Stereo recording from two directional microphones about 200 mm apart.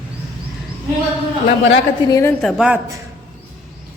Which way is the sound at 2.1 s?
15° left (ahead or behind).